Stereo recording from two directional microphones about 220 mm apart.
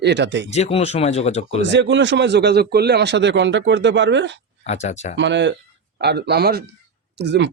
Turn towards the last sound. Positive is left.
turn(degrees=-50)  # may be behind; listen again after turning